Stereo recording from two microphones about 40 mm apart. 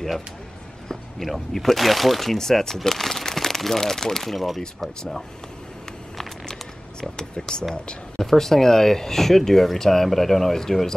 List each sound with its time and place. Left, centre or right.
1.2 s speech: centre
7.0 s speech: centre
8.2 s speech: centre